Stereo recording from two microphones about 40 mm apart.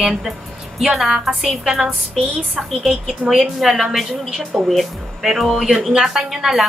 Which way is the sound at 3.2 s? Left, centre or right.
Right.